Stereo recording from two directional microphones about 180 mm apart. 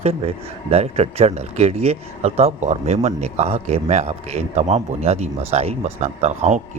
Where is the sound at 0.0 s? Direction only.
35° right (ahead or behind).